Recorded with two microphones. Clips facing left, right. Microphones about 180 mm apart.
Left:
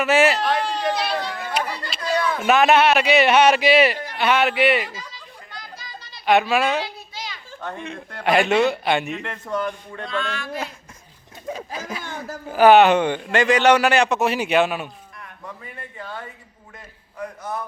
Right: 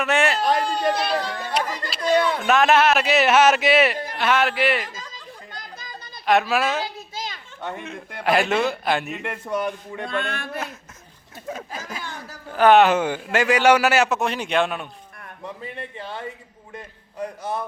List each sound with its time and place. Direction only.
0.0 s a sound: centre (ahead or behind)
0.4 s a sound: 45° right (ahead or behind)
1.4 s children playing: 40° right (ahead or behind)
2.4 s a man's voice: centre (ahead or behind)
5.5 s children playing: 50° right (ahead or behind)
6.2 s a man's voice: centre (ahead or behind)
6.8 s children playing: 45° right (ahead or behind)
7.9 s a man's voice: centre (ahead or behind)
10.1 s speech: 55° right (ahead or behind)
12.0 s a sound: 20° left (ahead or behind)
12.5 s a man's voice: 5° left (ahead or behind)
15.6 s a man's voice: 25° right (ahead or behind)